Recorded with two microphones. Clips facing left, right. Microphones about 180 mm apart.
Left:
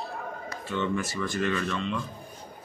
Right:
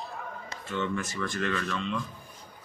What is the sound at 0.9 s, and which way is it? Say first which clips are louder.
Speech: left 3 dB; 10° left (ahead or behind).